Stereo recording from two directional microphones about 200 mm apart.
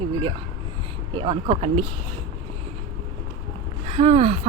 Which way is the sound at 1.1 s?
25° right (ahead or behind).